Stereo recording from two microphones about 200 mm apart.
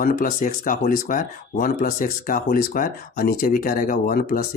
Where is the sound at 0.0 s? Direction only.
45° left (ahead or behind).